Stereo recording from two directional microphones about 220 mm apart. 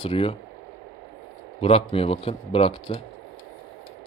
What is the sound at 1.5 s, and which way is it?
Speech, 25° left (ahead or behind).